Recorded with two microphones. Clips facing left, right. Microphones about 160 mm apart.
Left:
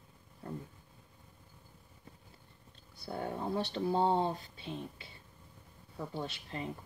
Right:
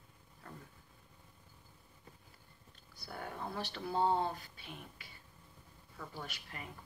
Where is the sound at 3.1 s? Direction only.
25° left (ahead or behind).